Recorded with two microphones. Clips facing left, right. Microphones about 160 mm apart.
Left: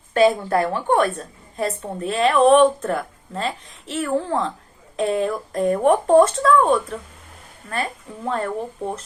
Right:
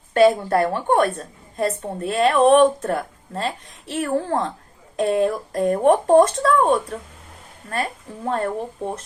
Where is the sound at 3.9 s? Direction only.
45° right (ahead or behind).